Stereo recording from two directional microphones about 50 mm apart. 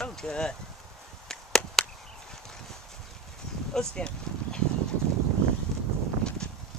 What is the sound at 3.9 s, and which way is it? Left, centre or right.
Speech, centre.